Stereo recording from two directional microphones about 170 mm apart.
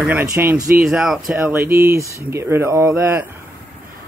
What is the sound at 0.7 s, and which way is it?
Speech, 5° right (ahead or behind).